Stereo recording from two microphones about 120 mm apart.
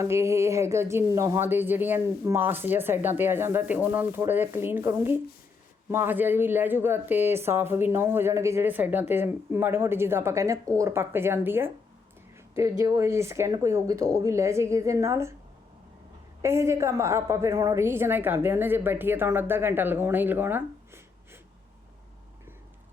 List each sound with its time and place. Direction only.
0.0 s speech: 25° right (ahead or behind)
16.4 s speech: 25° right (ahead or behind)